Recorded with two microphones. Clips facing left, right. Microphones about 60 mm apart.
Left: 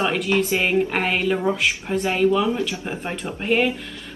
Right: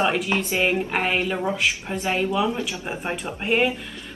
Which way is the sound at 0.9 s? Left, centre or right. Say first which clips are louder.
Left 2 dB; centre.